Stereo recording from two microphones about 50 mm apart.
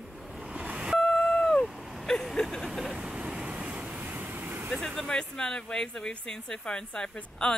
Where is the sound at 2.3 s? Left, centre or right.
Centre.